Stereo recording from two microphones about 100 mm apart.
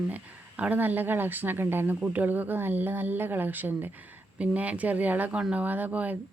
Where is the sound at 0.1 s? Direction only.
15° right (ahead or behind).